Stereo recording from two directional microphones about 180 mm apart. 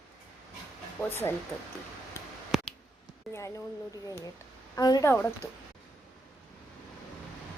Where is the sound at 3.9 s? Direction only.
20° left (ahead or behind).